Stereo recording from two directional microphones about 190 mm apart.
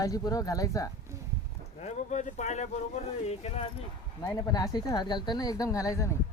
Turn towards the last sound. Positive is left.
turn(degrees=15)  # may be behind; listen again after turning